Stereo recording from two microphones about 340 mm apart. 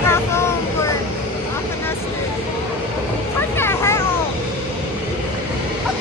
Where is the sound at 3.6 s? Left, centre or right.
Centre.